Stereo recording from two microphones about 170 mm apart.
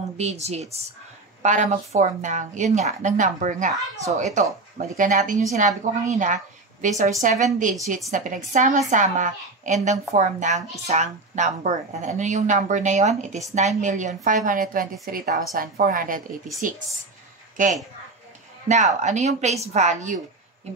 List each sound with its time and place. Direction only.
0.2 s speech: 40° right (ahead or behind)